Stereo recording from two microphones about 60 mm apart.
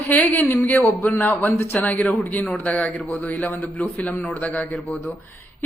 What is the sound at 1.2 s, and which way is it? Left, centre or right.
A man's voice, left.